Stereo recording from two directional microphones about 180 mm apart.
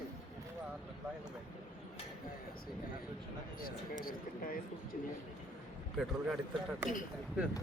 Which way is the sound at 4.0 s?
55° left (ahead or behind).